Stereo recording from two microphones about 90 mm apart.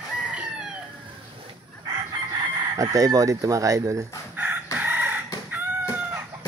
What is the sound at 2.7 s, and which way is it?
Speech, 40° right (ahead or behind).